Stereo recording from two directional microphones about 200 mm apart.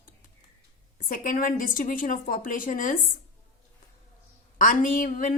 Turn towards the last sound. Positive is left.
turn(degrees=40)  # may be behind; listen again after turning